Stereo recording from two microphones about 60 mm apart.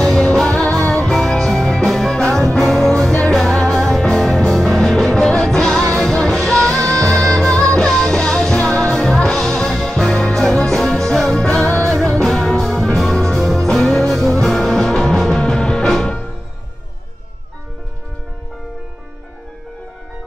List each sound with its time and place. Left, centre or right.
0.0 s music: centre
12.2 s music: centre